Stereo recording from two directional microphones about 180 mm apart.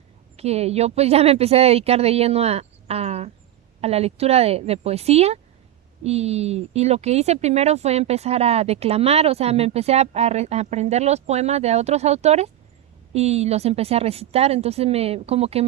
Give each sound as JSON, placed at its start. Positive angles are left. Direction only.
{"t": 0.3, "sound": "speech", "side_deg": -35}